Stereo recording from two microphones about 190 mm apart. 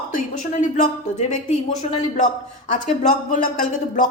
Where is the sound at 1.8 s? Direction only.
35° left (ahead or behind).